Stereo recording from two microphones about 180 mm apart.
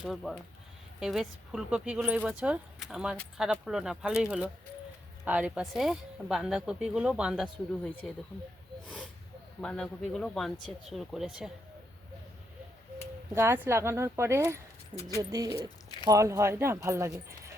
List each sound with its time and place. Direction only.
0.0 s speech: centre (ahead or behind)
9.6 s speech: 5° left (ahead or behind)
13.3 s speech: 15° right (ahead or behind)